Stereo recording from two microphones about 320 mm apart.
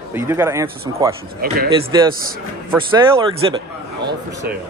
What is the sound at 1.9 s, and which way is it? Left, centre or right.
A man's voice, centre.